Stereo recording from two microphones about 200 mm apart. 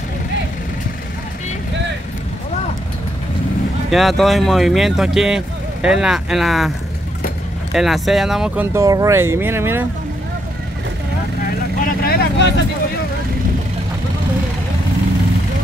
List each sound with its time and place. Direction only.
3.9 s speech: centre (ahead or behind)
7.7 s speech: centre (ahead or behind)
8.7 s speech: 15° right (ahead or behind)
12.0 s vehicle: 50° left (ahead or behind)